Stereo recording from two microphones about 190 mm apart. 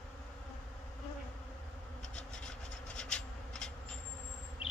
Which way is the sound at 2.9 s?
5° left (ahead or behind).